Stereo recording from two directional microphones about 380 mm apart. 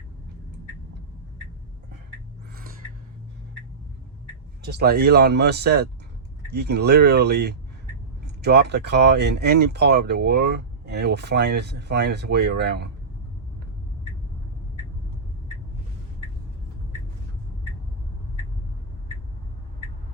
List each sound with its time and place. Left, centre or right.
4.7 s speech: right